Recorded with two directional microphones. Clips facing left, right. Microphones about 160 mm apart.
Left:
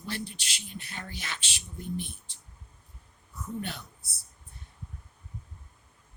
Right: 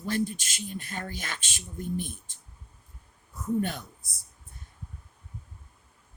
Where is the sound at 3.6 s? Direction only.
45° right (ahead or behind).